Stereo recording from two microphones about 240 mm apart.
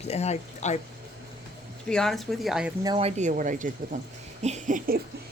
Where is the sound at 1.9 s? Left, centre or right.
Centre.